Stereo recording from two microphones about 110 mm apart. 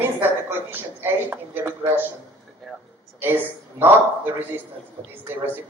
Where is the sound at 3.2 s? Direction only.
20° right (ahead or behind).